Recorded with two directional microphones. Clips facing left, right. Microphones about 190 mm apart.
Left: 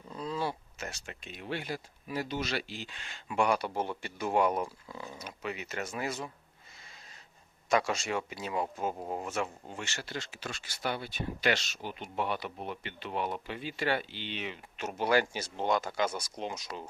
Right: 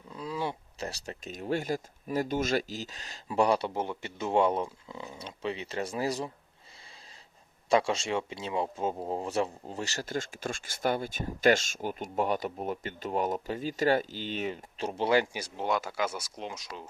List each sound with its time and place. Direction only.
0.1 s a sound: 5° right (ahead or behind)
0.8 s speech: 35° right (ahead or behind)
3.8 s speech: 20° right (ahead or behind)
7.7 s speech: 25° right (ahead or behind); by 16.8 s centre (ahead or behind)